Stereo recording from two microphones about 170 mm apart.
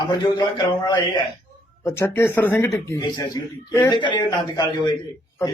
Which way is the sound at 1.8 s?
15° left (ahead or behind).